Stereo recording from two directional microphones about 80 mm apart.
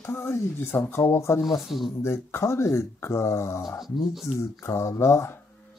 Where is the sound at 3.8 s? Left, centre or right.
Centre.